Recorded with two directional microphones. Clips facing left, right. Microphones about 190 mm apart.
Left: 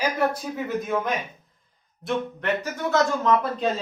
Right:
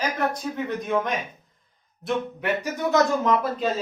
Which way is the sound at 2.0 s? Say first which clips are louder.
Even; 10° right (ahead or behind).